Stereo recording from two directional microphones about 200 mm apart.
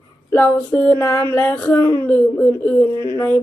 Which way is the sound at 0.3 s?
10° left (ahead or behind).